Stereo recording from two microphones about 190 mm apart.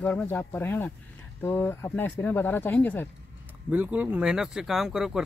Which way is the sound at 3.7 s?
10° right (ahead or behind).